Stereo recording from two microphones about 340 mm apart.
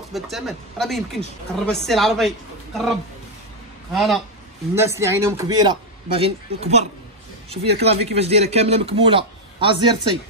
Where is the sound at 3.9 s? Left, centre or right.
Centre.